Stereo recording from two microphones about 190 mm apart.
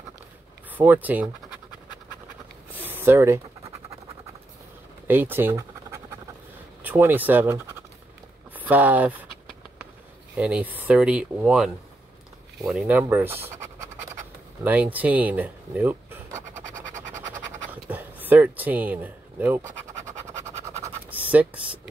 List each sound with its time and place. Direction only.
0.7 s speech: 10° right (ahead or behind)
2.7 s a sound: 10° right (ahead or behind)
5.0 s scratch: 10° right (ahead or behind)
6.8 s speech: 10° right (ahead or behind)
10.3 s speech: 5° right (ahead or behind)
16.3 s scratch: 40° right (ahead or behind)
17.8 s a sound: 10° right (ahead or behind)